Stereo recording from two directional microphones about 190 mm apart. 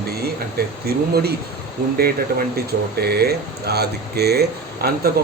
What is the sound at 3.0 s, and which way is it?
Speech, 55° right (ahead or behind).